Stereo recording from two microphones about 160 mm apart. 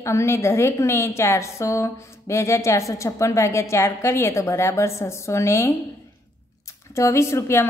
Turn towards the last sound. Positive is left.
turn(degrees=15)  # may be behind; listen again after turning